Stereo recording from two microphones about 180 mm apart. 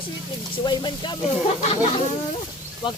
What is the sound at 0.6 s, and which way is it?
Speech, 25° left (ahead or behind).